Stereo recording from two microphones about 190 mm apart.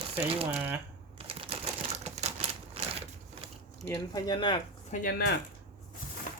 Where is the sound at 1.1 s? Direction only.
30° right (ahead or behind).